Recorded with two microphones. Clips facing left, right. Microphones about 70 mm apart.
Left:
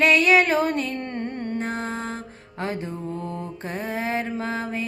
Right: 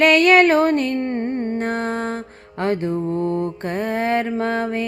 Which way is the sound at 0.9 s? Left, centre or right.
Right.